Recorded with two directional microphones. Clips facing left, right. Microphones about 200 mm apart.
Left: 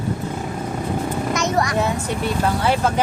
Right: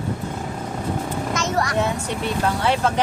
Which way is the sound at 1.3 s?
15° left (ahead or behind).